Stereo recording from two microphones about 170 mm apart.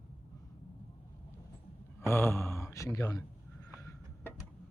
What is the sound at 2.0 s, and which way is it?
Speech, 15° left (ahead or behind).